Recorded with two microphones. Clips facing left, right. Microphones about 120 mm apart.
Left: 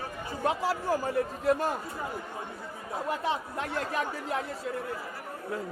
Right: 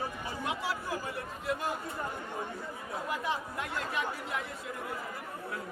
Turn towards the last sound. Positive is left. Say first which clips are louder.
# left 4 dB
turn(degrees=35)  # may be behind; listen again after turning